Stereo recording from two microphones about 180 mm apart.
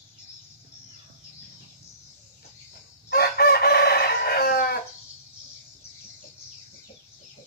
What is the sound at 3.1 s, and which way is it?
Chicken, 60° left (ahead or behind).